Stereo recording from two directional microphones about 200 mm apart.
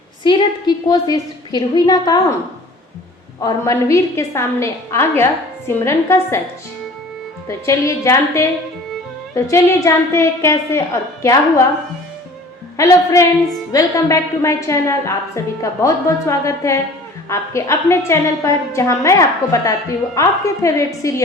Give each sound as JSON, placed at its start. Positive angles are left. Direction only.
{"t": 0.2, "sound": "a woman's voice", "side_deg": 25}
{"t": 3.4, "sound": "a woman's voice", "side_deg": 15}
{"t": 7.4, "sound": "a woman's voice", "side_deg": 15}
{"t": 12.7, "sound": "a woman's voice", "side_deg": 15}